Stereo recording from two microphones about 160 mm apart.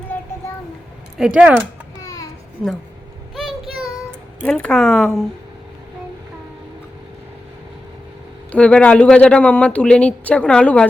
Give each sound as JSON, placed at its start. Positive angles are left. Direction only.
{"t": 0.1, "sound": "child singing", "side_deg": 10}
{"t": 1.2, "sound": "speech", "side_deg": -5}
{"t": 2.0, "sound": "a sound", "side_deg": 20}
{"t": 4.4, "sound": "speech", "side_deg": 5}
{"t": 8.5, "sound": "speech", "side_deg": 5}